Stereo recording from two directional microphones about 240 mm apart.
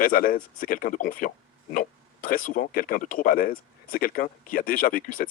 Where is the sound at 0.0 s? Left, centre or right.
Left.